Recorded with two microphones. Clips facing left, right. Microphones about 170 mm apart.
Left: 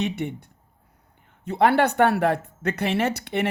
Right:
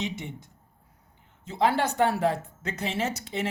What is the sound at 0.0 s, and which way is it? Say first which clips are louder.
Speech: left 7 dB; 60° left (ahead or behind).